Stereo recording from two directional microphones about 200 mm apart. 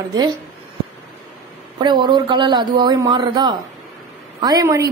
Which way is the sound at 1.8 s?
20° right (ahead or behind).